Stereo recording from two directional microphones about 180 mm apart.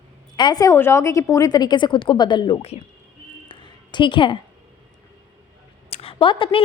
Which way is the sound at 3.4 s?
25° left (ahead or behind).